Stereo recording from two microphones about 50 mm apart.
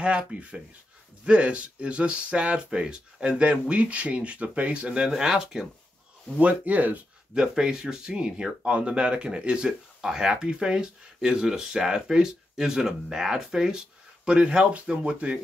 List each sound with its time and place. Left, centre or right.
0.0 s speech: right
5.1 s speech: centre
6.3 s speech: right
7.3 s speech: centre
10.0 s speech: centre